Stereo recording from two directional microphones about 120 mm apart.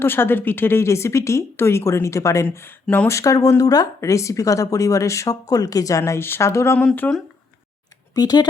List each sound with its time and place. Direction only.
0.0 s a woman's voice: 20° left (ahead or behind)
2.8 s speech: 10° left (ahead or behind)
3.1 s a woman's voice: 25° left (ahead or behind)
6.7 s speech: 15° left (ahead or behind)
8.1 s speech: 35° left (ahead or behind)